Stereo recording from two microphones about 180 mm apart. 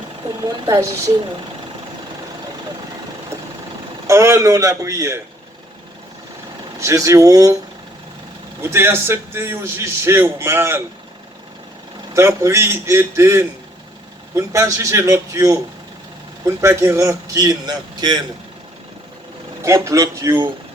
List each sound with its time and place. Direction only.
0.4 s a man's voice: 20° right (ahead or behind)
4.0 s a man's voice: 15° right (ahead or behind)
6.7 s a man's voice: 15° right (ahead or behind)
8.6 s a man's voice: 15° right (ahead or behind)
12.1 s a man's voice: 15° right (ahead or behind)
16.6 s a man's voice: 15° right (ahead or behind)
19.6 s a man's voice: 15° right (ahead or behind)